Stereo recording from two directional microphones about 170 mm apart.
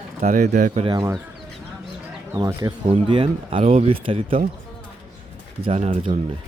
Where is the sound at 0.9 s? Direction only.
15° right (ahead or behind).